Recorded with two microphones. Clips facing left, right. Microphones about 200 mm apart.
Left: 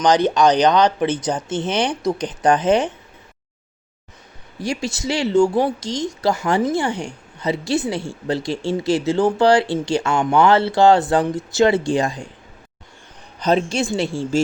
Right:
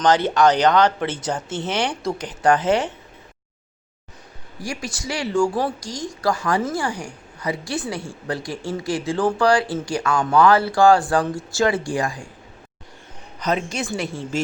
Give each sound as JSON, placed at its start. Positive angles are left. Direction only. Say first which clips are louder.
{"t": 0.0, "sound": "speech", "louder": "left 1 dB", "side_deg": 15}
{"t": 4.6, "sound": "speech", "louder": "left 6 dB", "side_deg": 25}
{"t": 13.4, "sound": "speech", "louder": "left 5 dB", "side_deg": 30}